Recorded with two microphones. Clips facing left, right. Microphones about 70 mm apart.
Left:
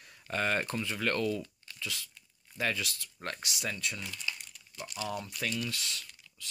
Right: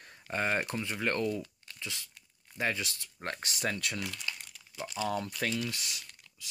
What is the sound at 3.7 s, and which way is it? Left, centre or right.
Speech, right.